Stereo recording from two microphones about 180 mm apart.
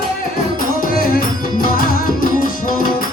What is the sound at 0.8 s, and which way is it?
Music, 50° left (ahead or behind).